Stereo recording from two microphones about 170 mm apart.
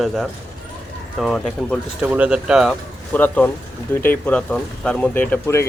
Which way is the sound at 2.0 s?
10° right (ahead or behind).